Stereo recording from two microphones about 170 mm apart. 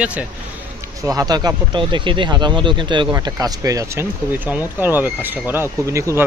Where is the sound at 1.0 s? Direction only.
20° right (ahead or behind).